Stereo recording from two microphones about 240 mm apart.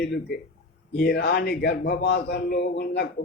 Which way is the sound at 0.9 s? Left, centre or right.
Left.